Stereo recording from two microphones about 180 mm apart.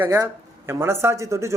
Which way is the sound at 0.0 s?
15° right (ahead or behind).